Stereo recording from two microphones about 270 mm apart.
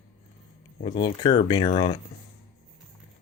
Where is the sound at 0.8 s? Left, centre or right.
Centre.